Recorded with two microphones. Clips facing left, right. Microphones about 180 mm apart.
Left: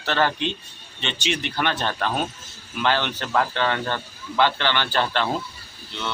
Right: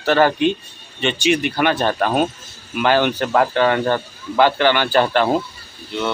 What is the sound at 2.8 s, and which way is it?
A man's voice, 10° right (ahead or behind).